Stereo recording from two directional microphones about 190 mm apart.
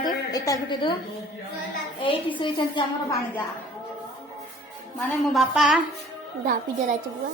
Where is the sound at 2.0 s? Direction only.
25° left (ahead or behind).